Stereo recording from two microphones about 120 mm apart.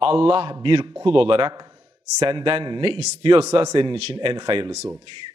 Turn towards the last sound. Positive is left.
turn(degrees=-40)  # may be behind; listen again after turning